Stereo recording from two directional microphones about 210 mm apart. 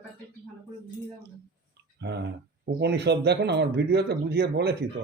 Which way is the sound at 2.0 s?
55° right (ahead or behind).